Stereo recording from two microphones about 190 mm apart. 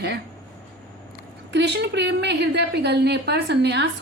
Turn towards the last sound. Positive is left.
turn(degrees=-65)  # may be behind; listen again after turning